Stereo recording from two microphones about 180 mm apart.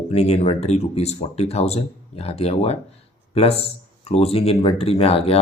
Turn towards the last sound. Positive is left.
turn(degrees=35)  # may be behind; listen again after turning